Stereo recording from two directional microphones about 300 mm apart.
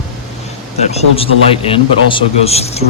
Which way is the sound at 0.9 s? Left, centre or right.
Centre.